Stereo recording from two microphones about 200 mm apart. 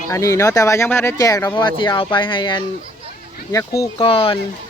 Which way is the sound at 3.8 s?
25° left (ahead or behind).